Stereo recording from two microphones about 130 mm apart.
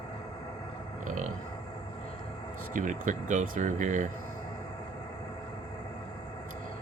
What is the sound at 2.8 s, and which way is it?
Speech, 75° right (ahead or behind).